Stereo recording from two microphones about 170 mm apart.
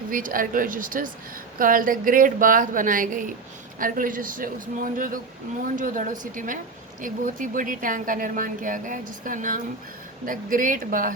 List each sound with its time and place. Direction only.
0.1 s a woman's voice: 55° right (ahead or behind)